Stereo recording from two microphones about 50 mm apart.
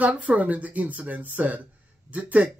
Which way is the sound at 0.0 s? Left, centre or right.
Right.